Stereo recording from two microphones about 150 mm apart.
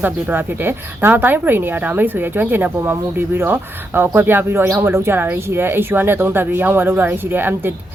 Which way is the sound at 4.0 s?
15° right (ahead or behind).